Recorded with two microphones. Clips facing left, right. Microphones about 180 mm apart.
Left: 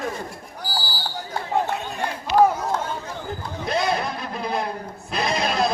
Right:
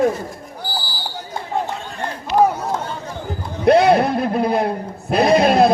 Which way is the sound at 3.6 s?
65° right (ahead or behind).